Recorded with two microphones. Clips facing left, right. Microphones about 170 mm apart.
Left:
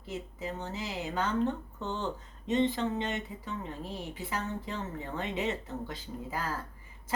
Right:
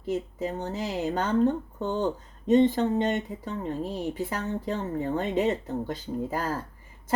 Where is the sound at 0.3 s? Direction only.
40° right (ahead or behind).